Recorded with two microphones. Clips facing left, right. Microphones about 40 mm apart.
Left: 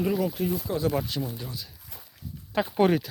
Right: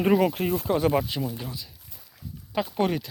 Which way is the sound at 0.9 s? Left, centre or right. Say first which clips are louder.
Right 3 dB; right.